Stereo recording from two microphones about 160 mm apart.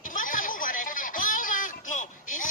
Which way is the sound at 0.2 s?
55° left (ahead or behind).